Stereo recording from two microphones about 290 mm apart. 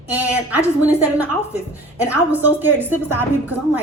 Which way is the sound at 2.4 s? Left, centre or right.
Centre.